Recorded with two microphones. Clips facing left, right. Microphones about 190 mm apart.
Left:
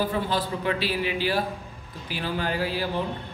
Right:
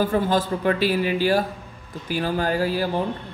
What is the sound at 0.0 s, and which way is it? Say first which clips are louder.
A man's voice: right 5 dB; 45° right (ahead or behind).